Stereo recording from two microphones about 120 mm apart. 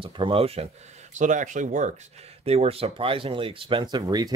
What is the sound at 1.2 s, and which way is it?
Speech, 90° right.